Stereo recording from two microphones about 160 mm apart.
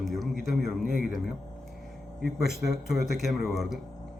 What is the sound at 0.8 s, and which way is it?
Speech, 65° right (ahead or behind).